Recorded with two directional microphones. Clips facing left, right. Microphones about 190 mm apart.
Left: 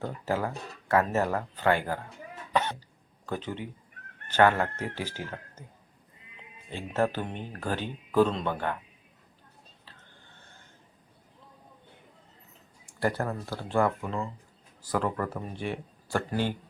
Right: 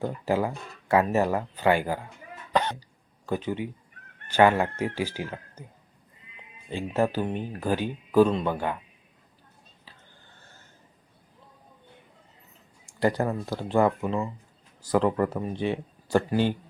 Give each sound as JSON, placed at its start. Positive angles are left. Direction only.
{"t": 0.0, "sound": "speech", "side_deg": -15}
{"t": 3.2, "sound": "speech", "side_deg": -10}
{"t": 6.7, "sound": "speech", "side_deg": -10}
{"t": 13.0, "sound": "speech", "side_deg": -15}